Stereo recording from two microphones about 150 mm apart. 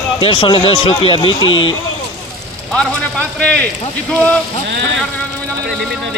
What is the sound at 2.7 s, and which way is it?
Speech, 5° left (ahead or behind).